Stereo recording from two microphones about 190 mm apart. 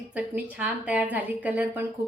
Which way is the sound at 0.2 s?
5° right (ahead or behind).